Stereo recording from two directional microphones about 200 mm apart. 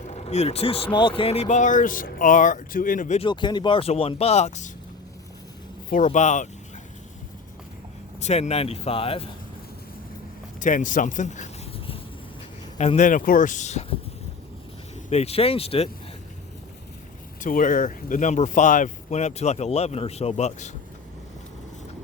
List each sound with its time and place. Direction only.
0.1 s speech: 35° left (ahead or behind)
3.2 s speech: 25° left (ahead or behind)
5.9 s speech: 40° left (ahead or behind)
8.2 s speech: 35° left (ahead or behind)
10.6 s speech: 40° left (ahead or behind)
12.7 s speech: 35° left (ahead or behind)
15.1 s speech: 30° left (ahead or behind)
17.4 s speech: 40° left (ahead or behind)